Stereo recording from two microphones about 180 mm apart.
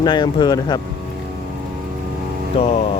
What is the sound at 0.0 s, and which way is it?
Speech, 25° left (ahead or behind).